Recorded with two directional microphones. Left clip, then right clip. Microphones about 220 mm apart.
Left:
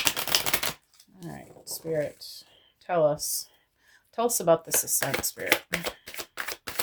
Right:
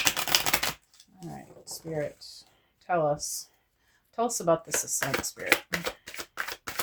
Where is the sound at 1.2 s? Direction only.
40° left (ahead or behind).